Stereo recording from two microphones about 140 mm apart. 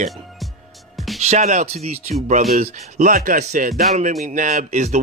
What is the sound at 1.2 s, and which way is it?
Speech, 55° right (ahead or behind).